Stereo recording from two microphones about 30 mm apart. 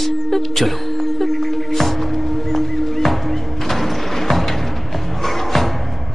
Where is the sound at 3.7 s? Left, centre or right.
Centre.